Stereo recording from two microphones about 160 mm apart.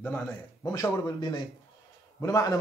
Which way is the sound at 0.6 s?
20° left (ahead or behind).